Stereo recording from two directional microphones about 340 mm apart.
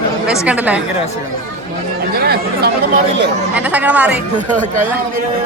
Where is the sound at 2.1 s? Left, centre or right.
Right.